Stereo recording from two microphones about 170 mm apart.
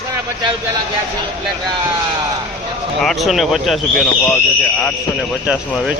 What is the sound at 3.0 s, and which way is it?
Speech, centre (ahead or behind).